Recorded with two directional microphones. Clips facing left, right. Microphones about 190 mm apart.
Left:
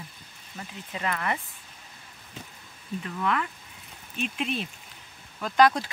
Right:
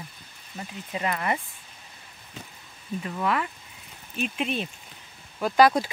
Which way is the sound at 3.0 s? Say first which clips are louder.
Right 2 dB; 10° right (ahead or behind).